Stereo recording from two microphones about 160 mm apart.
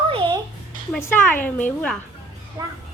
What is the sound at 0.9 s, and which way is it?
A woman's voice, 10° left (ahead or behind).